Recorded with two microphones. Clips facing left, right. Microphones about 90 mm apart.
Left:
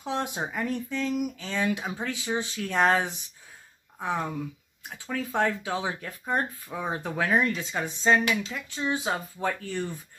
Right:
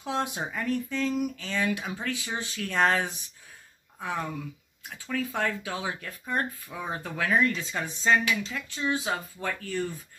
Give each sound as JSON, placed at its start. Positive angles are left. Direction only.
{"t": 0.3, "sound": "speech", "side_deg": 20}